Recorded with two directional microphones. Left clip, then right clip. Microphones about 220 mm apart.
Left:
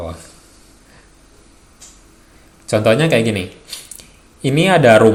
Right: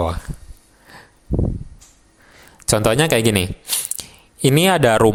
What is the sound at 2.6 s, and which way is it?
Speech, 45° right (ahead or behind).